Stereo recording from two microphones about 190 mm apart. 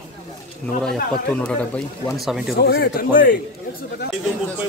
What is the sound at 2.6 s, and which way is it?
Speech, 55° left (ahead or behind).